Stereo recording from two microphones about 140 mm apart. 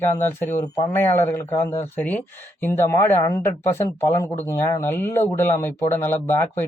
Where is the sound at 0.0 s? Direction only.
15° left (ahead or behind).